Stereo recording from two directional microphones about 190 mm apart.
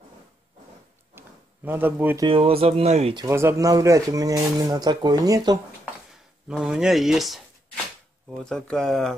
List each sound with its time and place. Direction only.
1.1 s a sound: 10° right (ahead or behind)
2.2 s speech: 30° right (ahead or behind)
3.3 s speech: 15° right (ahead or behind)
6.5 s speech: 5° right (ahead or behind)